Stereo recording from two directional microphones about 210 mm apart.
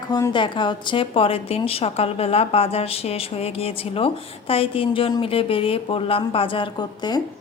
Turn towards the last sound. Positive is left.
turn(degrees=20)  # may be behind; listen again after turning